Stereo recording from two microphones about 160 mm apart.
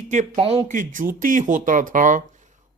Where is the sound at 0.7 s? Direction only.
55° right (ahead or behind).